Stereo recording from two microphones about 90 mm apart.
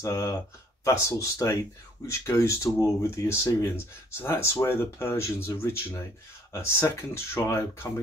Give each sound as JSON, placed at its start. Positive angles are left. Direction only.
{"t": 0.0, "sound": "speech", "side_deg": 35}